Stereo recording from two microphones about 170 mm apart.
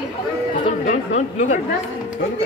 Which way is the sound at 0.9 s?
45° left (ahead or behind).